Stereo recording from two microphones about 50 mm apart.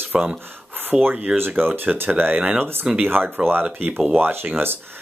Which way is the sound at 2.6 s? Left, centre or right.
Right.